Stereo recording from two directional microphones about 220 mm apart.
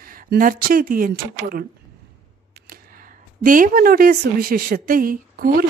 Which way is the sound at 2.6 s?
40° right (ahead or behind).